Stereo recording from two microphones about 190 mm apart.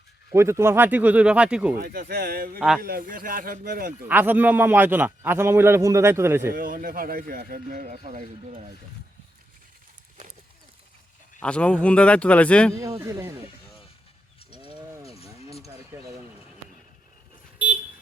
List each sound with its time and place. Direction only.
0.3 s a man's voice: 15° right (ahead or behind)
1.8 s speech: 50° right (ahead or behind)
2.6 s a man's voice: 5° right (ahead or behind)
2.8 s speech: 50° right (ahead or behind)
4.1 s a man's voice: 10° right (ahead or behind)
6.5 s speech: 45° right (ahead or behind)
11.3 s a man's voice: 5° left (ahead or behind)
13.0 s a man's voice: 15° right (ahead or behind)
14.6 s ratchet: 25° right (ahead or behind)
15.0 s a sound: 30° left (ahead or behind)
15.6 s a sound: 15° right (ahead or behind)